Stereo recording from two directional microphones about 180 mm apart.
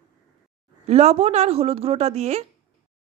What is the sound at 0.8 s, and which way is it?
Speech, 35° right (ahead or behind).